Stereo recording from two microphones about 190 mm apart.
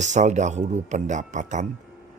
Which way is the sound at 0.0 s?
40° right (ahead or behind).